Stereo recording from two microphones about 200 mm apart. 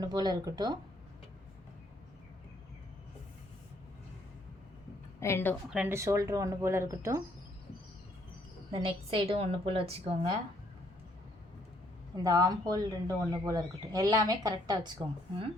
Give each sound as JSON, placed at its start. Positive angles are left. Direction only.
{"t": 0.0, "sound": "a woman's voice", "side_deg": -20}
{"t": 5.2, "sound": "a woman's voice", "side_deg": 10}
{"t": 5.7, "sound": "speech", "side_deg": -10}
{"t": 8.7, "sound": "a woman's voice", "side_deg": -25}
{"t": 12.1, "sound": "speech", "side_deg": -15}